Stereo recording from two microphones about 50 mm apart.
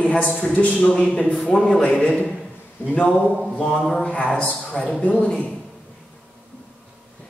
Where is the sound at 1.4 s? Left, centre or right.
Centre.